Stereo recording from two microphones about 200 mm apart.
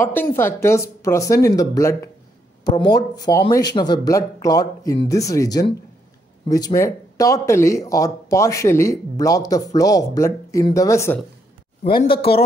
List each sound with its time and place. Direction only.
0.0 s speech: 10° left (ahead or behind)
11.8 s speech: 30° left (ahead or behind)